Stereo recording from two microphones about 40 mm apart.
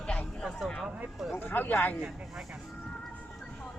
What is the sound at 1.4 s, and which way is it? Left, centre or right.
Speech, left.